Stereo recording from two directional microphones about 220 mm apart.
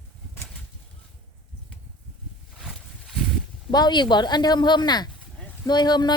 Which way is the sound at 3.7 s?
20° left (ahead or behind).